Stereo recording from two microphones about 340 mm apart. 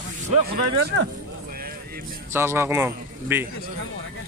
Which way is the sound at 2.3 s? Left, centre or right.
Centre.